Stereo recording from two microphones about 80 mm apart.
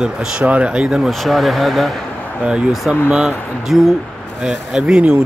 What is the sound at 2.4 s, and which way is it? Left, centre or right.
Speech, centre.